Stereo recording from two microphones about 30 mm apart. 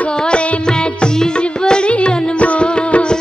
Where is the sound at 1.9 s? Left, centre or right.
Left.